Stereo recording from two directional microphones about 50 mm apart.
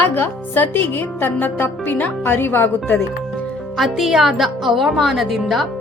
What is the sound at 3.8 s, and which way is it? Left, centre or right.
A woman's voice, centre.